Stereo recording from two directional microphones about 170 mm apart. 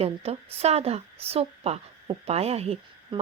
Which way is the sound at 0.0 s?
35° right (ahead or behind).